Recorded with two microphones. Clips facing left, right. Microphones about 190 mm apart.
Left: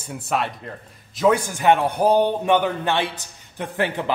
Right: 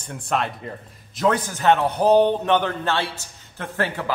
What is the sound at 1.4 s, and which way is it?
A man's voice, 15° left (ahead or behind).